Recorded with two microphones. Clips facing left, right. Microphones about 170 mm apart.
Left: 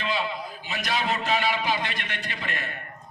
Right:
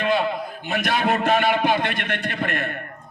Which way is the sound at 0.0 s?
55° right (ahead or behind).